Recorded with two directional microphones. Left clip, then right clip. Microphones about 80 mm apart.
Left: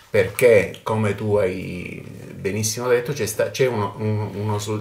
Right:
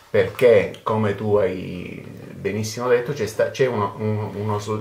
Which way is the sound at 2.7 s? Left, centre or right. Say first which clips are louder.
Right 1 dB; left.